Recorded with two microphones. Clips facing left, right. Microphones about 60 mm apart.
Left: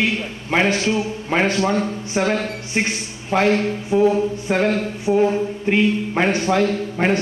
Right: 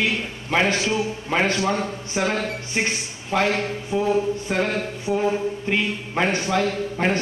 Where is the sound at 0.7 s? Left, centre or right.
Centre.